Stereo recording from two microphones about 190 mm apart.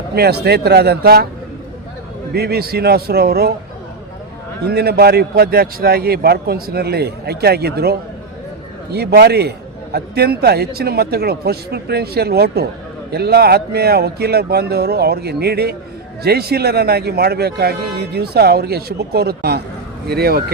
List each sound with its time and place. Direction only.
0.1 s speech: 60° right (ahead or behind)
2.3 s speech: 55° right (ahead or behind)
4.6 s speech: 55° right (ahead or behind)